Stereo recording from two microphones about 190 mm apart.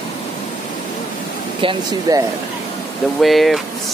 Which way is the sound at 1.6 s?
25° right (ahead or behind).